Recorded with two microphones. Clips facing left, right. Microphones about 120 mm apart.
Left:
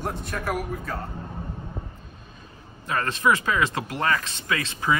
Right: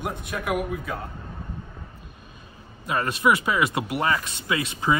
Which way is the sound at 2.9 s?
15° right (ahead or behind).